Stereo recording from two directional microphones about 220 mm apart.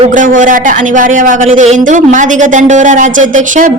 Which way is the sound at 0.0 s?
35° right (ahead or behind).